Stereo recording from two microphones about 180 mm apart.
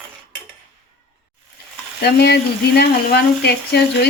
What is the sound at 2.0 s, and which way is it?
Speech, 65° left (ahead or behind).